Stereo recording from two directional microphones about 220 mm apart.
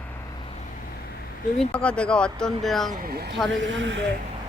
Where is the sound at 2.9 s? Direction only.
40° right (ahead or behind); by 4.0 s 55° right (ahead or behind).